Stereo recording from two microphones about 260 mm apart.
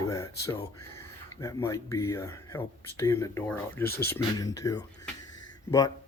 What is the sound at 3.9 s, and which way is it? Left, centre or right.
Speech, left.